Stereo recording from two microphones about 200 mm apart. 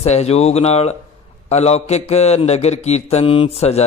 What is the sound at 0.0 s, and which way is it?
A man's voice, 35° left (ahead or behind).